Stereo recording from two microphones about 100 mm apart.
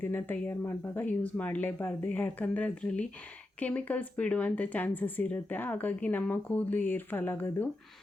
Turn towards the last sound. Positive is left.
turn(degrees=20)  # may be behind; listen again after turning